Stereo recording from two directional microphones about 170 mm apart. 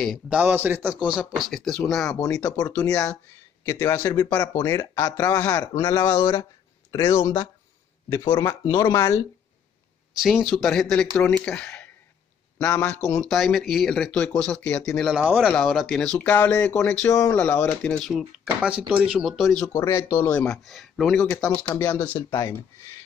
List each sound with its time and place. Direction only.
0.0 s speech: centre (ahead or behind)
0.4 s speech: 10° right (ahead or behind)
2.5 s speech: 20° left (ahead or behind)
10.1 s speech: centre (ahead or behind)
17.1 s speech: 20° left (ahead or behind); by 19.7 s centre (ahead or behind)
19.7 s speech: 15° left (ahead or behind)
20.3 s speech: 5° left (ahead or behind)